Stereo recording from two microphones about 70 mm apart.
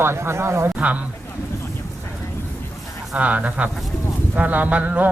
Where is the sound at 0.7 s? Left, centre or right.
Centre.